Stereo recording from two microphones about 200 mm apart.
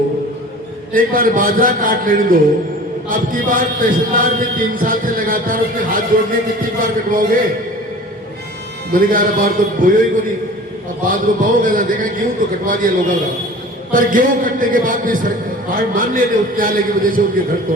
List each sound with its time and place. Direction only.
0.9 s a man's voice: 45° right (ahead or behind)
8.9 s a man's voice: 45° right (ahead or behind)
11.1 s a man's voice: 40° right (ahead or behind)